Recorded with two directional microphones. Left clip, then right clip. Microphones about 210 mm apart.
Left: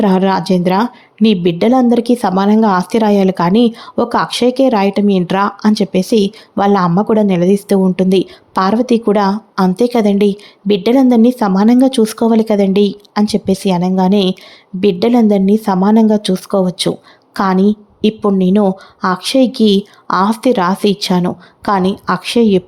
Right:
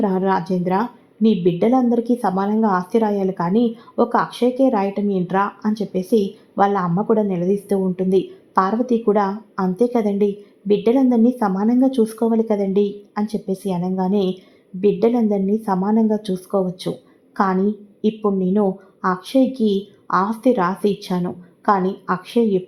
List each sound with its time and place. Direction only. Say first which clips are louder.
0.0 s speech: left 6 dB; 35° left (ahead or behind)